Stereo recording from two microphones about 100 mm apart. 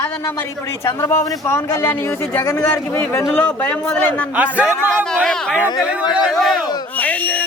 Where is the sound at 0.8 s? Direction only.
25° left (ahead or behind).